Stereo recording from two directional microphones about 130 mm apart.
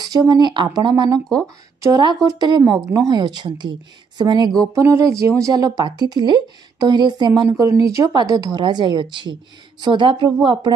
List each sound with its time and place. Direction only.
0.0 s a woman's voice: 30° right (ahead or behind)
4.6 s a woman's voice: 25° right (ahead or behind)